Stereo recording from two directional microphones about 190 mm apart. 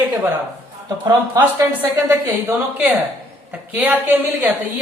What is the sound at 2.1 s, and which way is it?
Speech, 10° right (ahead or behind).